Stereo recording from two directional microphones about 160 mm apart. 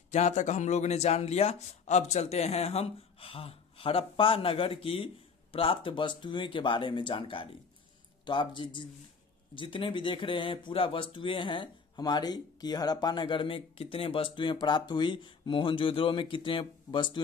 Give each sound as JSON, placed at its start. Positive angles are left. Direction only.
{"t": 0.1, "sound": "speech", "side_deg": 45}